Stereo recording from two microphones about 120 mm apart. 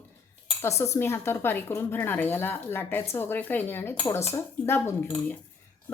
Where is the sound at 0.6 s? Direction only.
25° left (ahead or behind).